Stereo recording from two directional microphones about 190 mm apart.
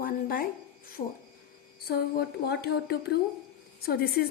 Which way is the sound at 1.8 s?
55° left (ahead or behind).